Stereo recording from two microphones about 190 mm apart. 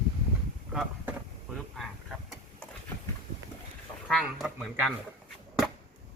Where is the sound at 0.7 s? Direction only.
5° right (ahead or behind).